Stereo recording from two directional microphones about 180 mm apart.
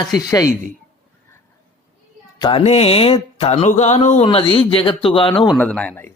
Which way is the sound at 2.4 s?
30° left (ahead or behind).